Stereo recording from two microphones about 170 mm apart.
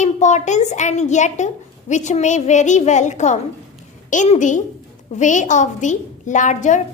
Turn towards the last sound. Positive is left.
turn(degrees=45)  # may be behind; listen again after turning